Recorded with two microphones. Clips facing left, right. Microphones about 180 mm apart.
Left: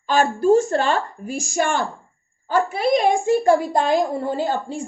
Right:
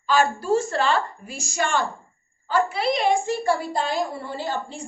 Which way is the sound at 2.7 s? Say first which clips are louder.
Left 4 dB; 50° left (ahead or behind).